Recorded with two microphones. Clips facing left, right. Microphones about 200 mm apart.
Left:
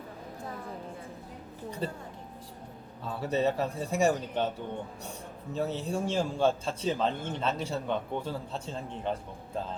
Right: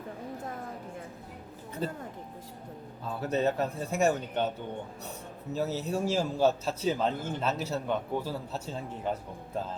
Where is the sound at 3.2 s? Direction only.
Centre (ahead or behind).